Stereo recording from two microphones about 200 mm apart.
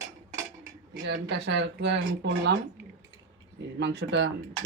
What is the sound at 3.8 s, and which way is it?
Speech, 60° right (ahead or behind).